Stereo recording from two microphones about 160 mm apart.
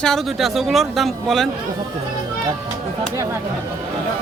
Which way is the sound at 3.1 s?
15° right (ahead or behind).